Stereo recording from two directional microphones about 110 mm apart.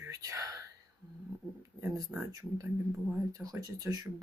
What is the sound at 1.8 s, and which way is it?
Speech, 25° right (ahead or behind).